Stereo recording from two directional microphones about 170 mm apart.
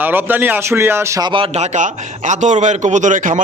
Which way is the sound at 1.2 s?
30° right (ahead or behind).